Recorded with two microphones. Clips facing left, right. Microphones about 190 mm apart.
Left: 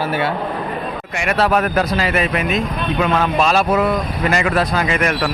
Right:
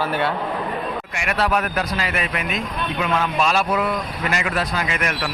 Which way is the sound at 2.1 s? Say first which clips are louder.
Left 7 dB; 25° left (ahead or behind).